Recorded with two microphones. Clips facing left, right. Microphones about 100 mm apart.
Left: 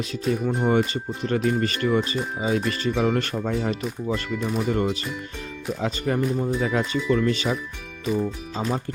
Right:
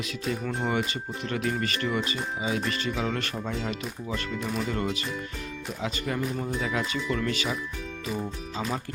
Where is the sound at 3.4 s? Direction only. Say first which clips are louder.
Left 6 dB; 50° left (ahead or behind).